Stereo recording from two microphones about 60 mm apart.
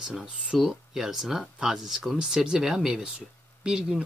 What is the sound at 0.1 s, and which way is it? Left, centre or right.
Speech, centre.